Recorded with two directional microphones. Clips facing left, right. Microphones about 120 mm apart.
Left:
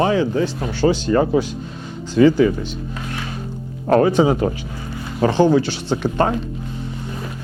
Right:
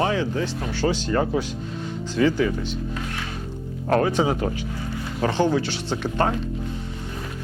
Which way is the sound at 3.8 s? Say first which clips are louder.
Left 6 dB; 25° left (ahead or behind).